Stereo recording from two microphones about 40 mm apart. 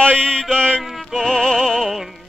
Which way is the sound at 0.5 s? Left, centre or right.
Left.